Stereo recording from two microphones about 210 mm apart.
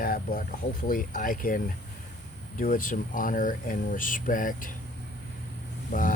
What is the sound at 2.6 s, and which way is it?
Speech, 40° left (ahead or behind).